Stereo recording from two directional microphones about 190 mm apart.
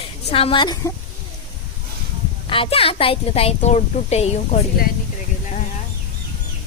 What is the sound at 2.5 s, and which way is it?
A woman's voice, 30° left (ahead or behind).